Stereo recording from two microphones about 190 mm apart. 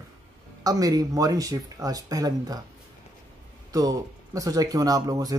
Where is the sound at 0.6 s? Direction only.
20° right (ahead or behind).